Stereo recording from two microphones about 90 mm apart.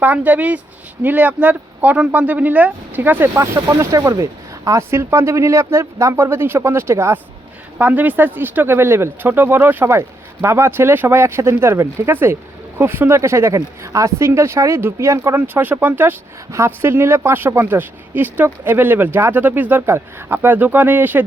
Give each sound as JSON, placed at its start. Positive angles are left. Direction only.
{"t": 0.0, "sound": "speech", "side_deg": -20}
{"t": 7.8, "sound": "speech", "side_deg": -20}